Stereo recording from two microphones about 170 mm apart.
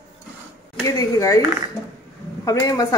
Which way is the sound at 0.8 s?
20° left (ahead or behind).